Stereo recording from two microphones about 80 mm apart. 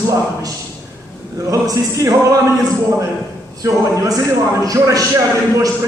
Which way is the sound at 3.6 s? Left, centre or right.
Right.